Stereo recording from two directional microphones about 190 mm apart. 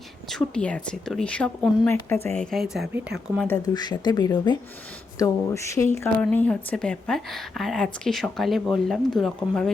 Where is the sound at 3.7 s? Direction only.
20° left (ahead or behind).